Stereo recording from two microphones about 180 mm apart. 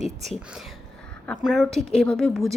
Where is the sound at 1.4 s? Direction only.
Centre (ahead or behind).